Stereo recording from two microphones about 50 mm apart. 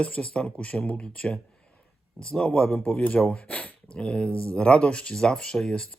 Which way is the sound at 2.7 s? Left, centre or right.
Left.